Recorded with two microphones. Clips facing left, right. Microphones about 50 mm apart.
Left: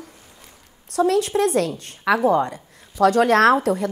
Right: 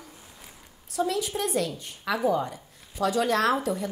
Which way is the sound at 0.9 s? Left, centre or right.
Left.